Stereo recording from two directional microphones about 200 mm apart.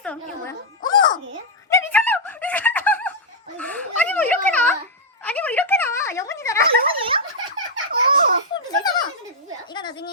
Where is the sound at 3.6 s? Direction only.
5° left (ahead or behind).